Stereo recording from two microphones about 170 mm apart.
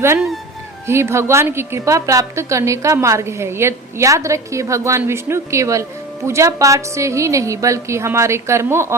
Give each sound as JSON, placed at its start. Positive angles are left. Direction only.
{"t": 0.9, "sound": "a woman's voice", "side_deg": -15}